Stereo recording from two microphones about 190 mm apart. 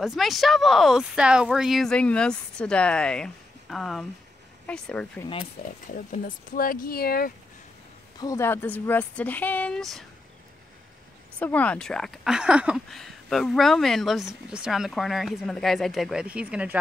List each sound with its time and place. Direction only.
0.0 s speech: centre (ahead or behind)
6.1 s speech: 45° left (ahead or behind)
8.2 s speech: 15° left (ahead or behind)
11.3 s speech: 5° left (ahead or behind)